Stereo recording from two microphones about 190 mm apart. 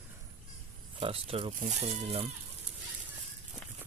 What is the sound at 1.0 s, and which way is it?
A man's voice, 30° right (ahead or behind).